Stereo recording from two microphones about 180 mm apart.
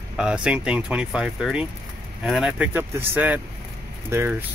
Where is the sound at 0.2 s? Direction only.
5° right (ahead or behind).